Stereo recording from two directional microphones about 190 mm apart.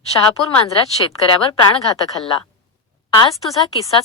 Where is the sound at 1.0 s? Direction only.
25° left (ahead or behind).